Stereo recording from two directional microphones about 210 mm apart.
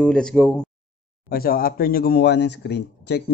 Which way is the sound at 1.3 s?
45° left (ahead or behind).